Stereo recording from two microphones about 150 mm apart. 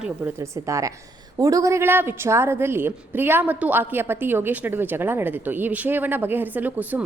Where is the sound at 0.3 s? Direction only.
20° right (ahead or behind).